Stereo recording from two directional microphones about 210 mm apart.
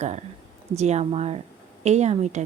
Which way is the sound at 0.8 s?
30° right (ahead or behind).